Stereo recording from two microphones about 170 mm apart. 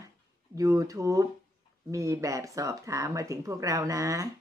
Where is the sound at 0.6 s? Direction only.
20° right (ahead or behind).